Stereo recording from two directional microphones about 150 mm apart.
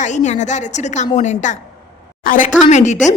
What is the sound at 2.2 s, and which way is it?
Speech, 65° left (ahead or behind).